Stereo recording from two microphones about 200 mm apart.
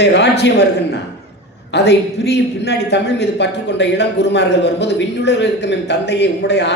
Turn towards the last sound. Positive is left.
turn(degrees=60)  # may be behind; listen again after turning